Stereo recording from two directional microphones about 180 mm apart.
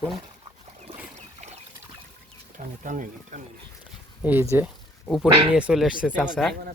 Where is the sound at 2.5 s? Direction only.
45° right (ahead or behind).